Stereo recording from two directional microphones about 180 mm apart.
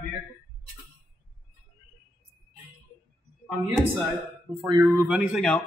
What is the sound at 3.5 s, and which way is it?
Speech, 5° right (ahead or behind).